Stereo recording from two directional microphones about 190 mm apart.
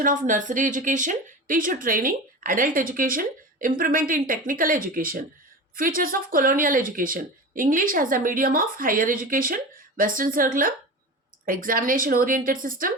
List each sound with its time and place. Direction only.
0.0 s a woman's voice: 45° right (ahead or behind)